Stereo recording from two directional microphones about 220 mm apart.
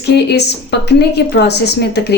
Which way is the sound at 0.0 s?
50° left (ahead or behind).